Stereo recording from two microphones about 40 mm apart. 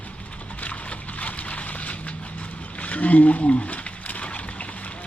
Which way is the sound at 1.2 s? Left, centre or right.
Left.